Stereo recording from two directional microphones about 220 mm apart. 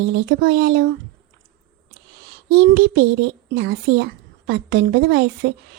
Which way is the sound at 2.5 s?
45° right (ahead or behind).